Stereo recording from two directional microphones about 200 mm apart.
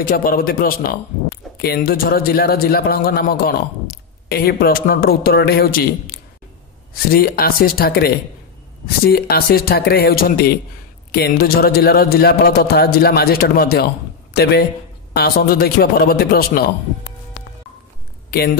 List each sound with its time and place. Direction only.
0.1 s a man's voice: 45° left (ahead or behind)
18.3 s speech: 50° left (ahead or behind)